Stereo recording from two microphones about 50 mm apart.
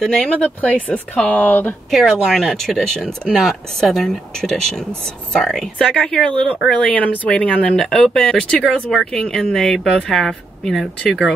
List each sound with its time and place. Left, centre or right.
0.2 s speech: left
1.9 s speech: centre
5.9 s speech: centre
7.7 s speech: centre
10.1 s speech: centre